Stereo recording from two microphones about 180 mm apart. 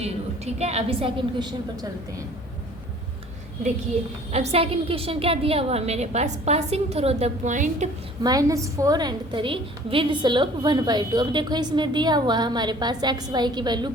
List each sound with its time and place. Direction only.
0.0 s a woman's voice: 35° right (ahead or behind)
4.3 s a woman's voice: 35° right (ahead or behind)
8.2 s a woman's voice: 20° right (ahead or behind)